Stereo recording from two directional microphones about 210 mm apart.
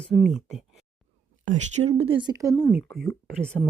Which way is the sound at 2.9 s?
5° left (ahead or behind).